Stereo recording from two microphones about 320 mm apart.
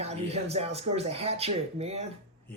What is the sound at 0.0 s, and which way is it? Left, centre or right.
Speech, centre.